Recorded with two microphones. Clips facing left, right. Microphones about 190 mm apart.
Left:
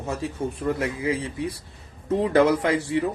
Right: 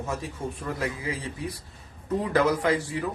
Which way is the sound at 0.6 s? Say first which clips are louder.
Left 7 dB; 25° left (ahead or behind).